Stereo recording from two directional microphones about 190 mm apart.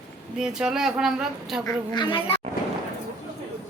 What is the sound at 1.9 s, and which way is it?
Speech, 25° left (ahead or behind).